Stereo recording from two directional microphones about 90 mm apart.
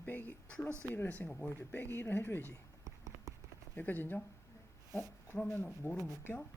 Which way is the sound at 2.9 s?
40° right (ahead or behind).